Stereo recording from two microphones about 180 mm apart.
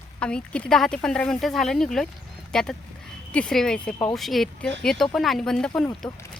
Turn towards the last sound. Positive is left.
turn(degrees=0)  # may be behind; listen again after turning